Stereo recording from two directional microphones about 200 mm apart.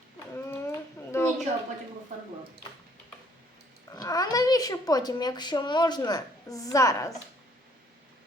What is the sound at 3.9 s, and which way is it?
Speech, 20° left (ahead or behind).